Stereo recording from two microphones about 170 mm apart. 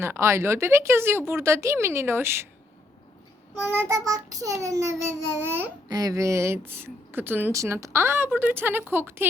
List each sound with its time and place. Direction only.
0.0 s speech: 15° right (ahead or behind)
3.8 s a child's voice: 20° right (ahead or behind)